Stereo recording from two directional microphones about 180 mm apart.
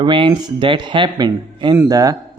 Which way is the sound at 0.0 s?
25° right (ahead or behind).